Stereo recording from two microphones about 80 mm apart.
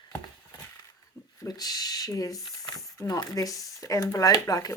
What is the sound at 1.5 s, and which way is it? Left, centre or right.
Speech, left.